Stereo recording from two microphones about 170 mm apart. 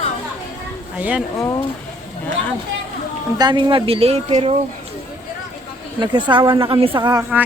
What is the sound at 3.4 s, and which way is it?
Speech, 30° right (ahead or behind).